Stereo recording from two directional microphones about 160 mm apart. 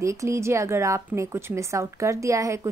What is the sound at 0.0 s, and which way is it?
Speech, 20° right (ahead or behind).